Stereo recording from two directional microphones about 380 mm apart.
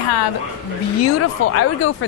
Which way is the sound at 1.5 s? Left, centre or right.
Left.